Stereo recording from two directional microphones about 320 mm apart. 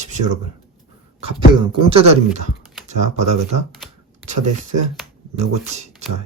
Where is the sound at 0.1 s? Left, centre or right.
Right.